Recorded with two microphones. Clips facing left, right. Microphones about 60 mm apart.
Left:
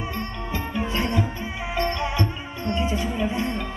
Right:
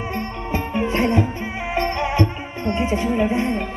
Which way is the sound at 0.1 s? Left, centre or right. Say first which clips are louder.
Right 5 dB; right.